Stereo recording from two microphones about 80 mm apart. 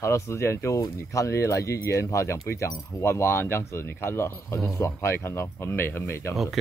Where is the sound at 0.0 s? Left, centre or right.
Left.